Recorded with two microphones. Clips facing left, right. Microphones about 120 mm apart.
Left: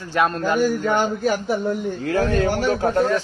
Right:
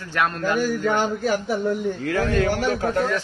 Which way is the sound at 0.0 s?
30° left (ahead or behind).